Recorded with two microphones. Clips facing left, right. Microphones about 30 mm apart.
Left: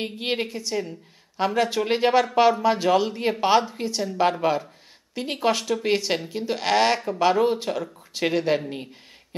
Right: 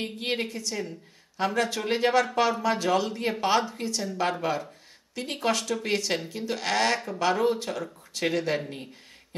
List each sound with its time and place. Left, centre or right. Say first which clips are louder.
0.0 s speech: left 3 dB; centre